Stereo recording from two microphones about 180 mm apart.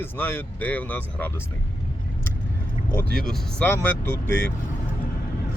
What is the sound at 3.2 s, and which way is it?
Speech, 5° left (ahead or behind).